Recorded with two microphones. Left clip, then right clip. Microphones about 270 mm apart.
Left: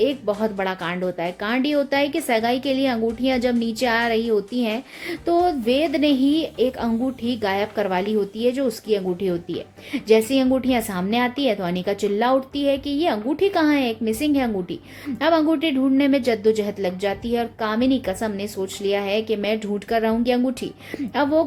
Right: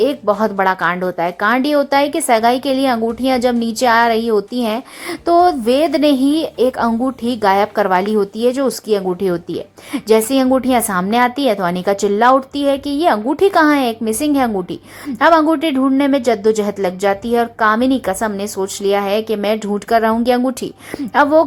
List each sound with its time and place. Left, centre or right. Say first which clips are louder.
0.0 s a woman's voice: right 7 dB; centre